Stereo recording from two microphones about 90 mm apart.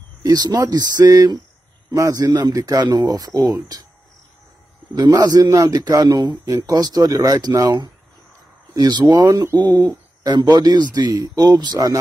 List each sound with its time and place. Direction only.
0.2 s speech: 45° right (ahead or behind)
4.9 s speech: 50° right (ahead or behind)